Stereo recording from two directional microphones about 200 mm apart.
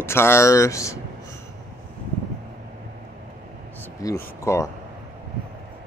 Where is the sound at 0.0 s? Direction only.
10° left (ahead or behind).